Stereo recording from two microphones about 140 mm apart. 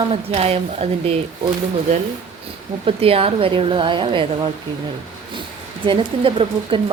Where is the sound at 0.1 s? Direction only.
45° right (ahead or behind).